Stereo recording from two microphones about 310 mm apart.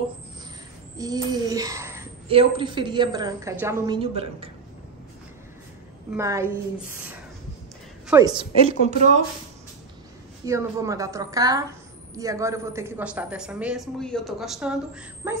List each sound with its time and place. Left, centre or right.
0.9 s a woman's voice: centre
6.1 s a woman's voice: centre
10.4 s a woman's voice: centre